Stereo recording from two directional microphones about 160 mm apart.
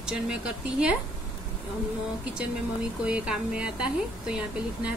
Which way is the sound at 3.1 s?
5° right (ahead or behind).